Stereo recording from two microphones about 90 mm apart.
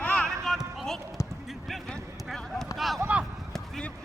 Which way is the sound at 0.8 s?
5° left (ahead or behind).